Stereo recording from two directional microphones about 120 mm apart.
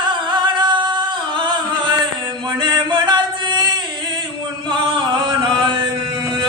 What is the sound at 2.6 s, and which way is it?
Music, 40° right (ahead or behind).